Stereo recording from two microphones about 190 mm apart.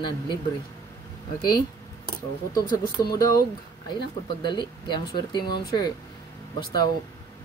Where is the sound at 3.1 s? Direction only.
20° left (ahead or behind).